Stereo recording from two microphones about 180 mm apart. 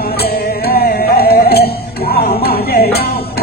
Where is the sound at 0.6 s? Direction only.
55° left (ahead or behind).